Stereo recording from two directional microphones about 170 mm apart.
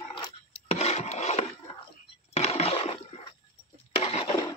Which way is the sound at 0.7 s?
40° left (ahead or behind).